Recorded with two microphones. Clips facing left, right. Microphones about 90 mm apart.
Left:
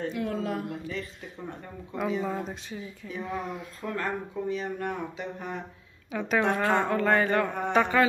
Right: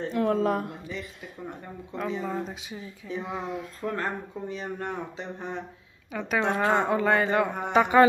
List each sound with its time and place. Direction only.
0.1 s speech: 45° right (ahead or behind)
2.0 s speech: 5° left (ahead or behind)
3.1 s speech: 20° right (ahead or behind)
3.9 s speech: 30° right (ahead or behind)
6.1 s speech: centre (ahead or behind)
6.4 s speech: 20° right (ahead or behind)